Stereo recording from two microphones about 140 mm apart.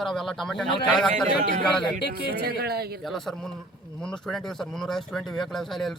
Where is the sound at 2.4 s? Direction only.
90° right.